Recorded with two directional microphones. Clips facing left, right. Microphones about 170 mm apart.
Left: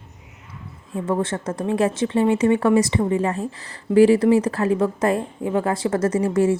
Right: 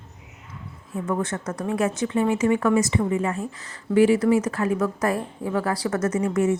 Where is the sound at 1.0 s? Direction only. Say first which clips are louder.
Left 3 dB; 30° left (ahead or behind).